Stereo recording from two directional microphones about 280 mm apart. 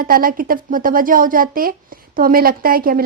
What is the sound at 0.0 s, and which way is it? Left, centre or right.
A woman's voice, right.